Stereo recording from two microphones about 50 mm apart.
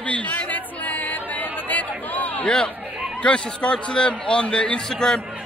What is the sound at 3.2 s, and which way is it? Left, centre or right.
A man's voice, left.